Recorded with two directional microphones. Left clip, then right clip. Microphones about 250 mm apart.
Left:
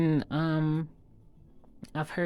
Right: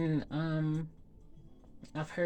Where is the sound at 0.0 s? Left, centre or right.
Left.